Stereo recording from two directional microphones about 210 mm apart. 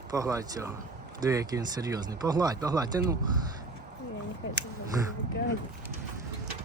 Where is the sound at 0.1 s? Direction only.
15° right (ahead or behind).